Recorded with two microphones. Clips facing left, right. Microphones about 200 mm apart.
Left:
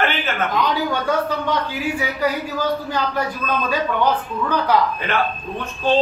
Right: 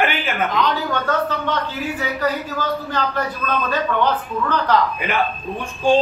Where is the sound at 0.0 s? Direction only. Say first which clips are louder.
Right 1 dB; 15° right (ahead or behind).